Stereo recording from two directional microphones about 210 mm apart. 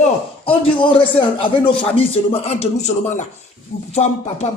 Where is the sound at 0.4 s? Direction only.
25° left (ahead or behind).